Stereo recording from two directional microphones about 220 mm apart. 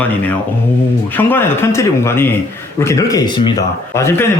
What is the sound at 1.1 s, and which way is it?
Speech, 10° left (ahead or behind).